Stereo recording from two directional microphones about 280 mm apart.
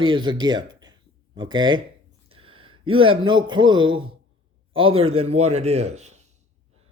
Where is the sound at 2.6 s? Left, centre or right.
Centre.